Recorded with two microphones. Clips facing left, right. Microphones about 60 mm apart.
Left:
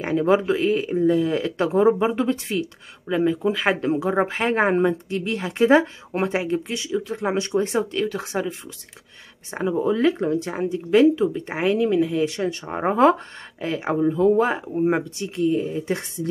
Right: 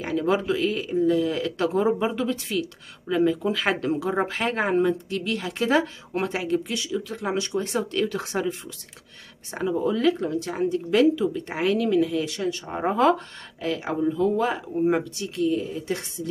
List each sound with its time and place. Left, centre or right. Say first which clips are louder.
0.0 s speech: left 4 dB; left
3.1 s speech: left 1 dB; centre
7.9 s speech: left 1 dB; centre
9.5 s speech: left 2 dB; left